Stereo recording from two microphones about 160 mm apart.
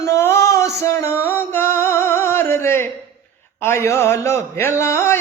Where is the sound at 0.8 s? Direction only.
15° left (ahead or behind).